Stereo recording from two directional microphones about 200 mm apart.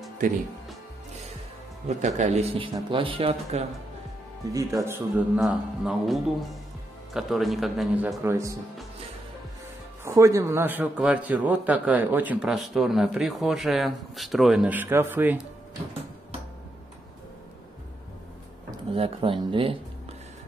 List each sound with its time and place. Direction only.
0.2 s speech: 40° right (ahead or behind)
1.9 s a man's voice: 35° right (ahead or behind)
4.5 s a man's voice: 15° right (ahead or behind); by 8.2 s centre (ahead or behind)
8.2 s speech: 15° right (ahead or behind)
10.0 s a man's voice: 15° right (ahead or behind)
18.9 s speech: 25° right (ahead or behind)